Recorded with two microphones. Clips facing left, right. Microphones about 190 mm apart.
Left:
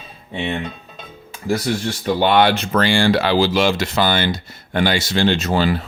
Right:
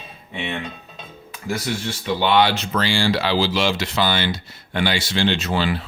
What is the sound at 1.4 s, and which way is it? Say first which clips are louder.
Speech: left 5 dB; 35° left (ahead or behind).